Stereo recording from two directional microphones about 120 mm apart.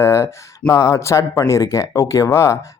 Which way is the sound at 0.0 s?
20° left (ahead or behind).